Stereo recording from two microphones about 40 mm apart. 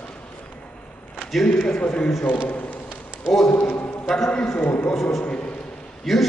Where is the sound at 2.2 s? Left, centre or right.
Left.